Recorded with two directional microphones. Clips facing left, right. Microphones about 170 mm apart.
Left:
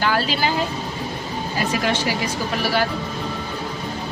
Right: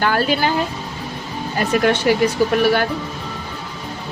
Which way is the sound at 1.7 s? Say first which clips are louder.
Right 9 dB; 55° right (ahead or behind).